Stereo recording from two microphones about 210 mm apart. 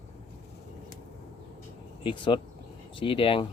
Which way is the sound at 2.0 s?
25° left (ahead or behind).